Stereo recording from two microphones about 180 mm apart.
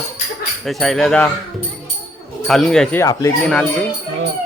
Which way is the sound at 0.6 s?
Centre (ahead or behind).